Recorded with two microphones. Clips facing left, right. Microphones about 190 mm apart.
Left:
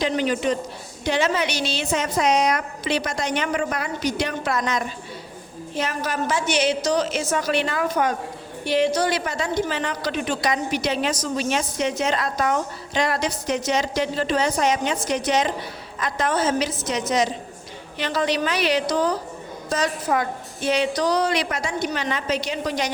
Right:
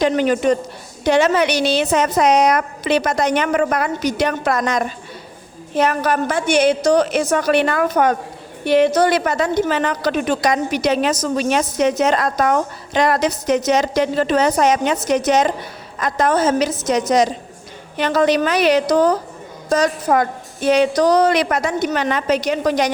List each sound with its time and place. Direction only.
0.0 s a woman's voice: 50° right (ahead or behind)
1.0 s a woman's voice: 65° right (ahead or behind); by 4.9 s 45° right (ahead or behind)
5.7 s a woman's voice: 65° right (ahead or behind)